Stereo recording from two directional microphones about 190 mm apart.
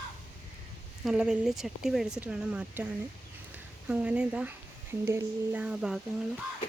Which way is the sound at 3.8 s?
5° right (ahead or behind).